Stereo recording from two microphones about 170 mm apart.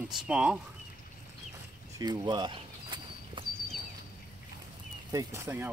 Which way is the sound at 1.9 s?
25° right (ahead or behind).